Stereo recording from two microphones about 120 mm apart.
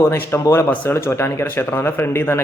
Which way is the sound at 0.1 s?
25° left (ahead or behind).